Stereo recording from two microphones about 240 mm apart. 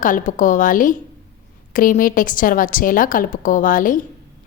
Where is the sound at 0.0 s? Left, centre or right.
Left.